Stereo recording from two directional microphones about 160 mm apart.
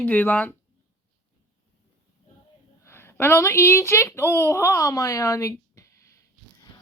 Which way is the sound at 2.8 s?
15° left (ahead or behind).